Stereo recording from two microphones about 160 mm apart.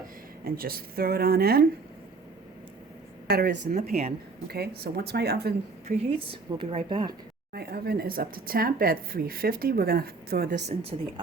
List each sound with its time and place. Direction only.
0.4 s speech: 65° right (ahead or behind)
3.2 s speech: 70° right (ahead or behind)
6.0 s speech: 35° right (ahead or behind)
7.5 s speech: 80° right
10.9 s speech: 35° right (ahead or behind)